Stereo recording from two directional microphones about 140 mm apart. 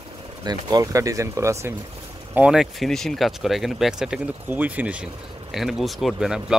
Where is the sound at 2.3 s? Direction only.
5° right (ahead or behind).